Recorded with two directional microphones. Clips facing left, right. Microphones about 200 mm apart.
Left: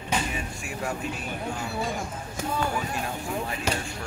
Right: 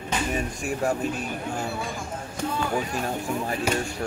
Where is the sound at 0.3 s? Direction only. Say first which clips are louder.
Right 7 dB; 45° right (ahead or behind).